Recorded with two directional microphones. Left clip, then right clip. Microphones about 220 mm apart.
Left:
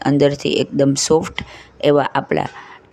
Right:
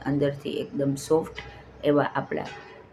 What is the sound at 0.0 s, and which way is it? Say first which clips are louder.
Speech: left 11 dB; 45° left (ahead or behind).